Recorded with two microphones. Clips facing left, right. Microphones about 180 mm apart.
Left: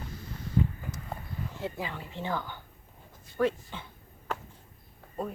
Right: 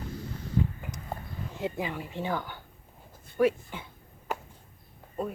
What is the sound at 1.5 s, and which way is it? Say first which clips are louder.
Speech: right 5 dB; 15° right (ahead or behind).